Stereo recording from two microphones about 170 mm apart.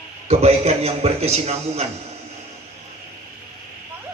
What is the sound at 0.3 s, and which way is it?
A man's voice, 40° right (ahead or behind).